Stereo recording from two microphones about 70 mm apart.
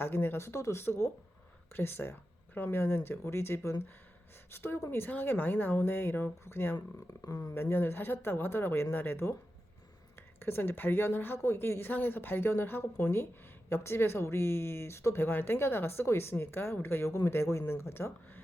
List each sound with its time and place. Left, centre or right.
0.0 s speech: left
7.3 s speech: left
10.4 s speech: left